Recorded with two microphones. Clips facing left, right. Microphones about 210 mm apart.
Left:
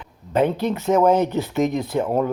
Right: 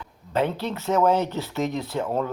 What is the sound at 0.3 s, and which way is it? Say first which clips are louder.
Speech: left 5 dB; 15° left (ahead or behind).